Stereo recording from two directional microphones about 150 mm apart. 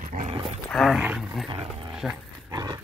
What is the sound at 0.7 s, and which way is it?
Roaring cats, centre (ahead or behind).